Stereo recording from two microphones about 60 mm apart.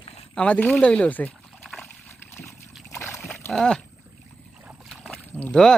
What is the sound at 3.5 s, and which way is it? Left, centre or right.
Speech, centre.